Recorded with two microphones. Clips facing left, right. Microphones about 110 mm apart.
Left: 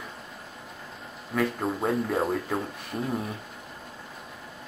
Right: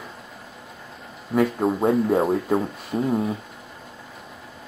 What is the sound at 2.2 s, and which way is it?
Speech, 25° right (ahead or behind).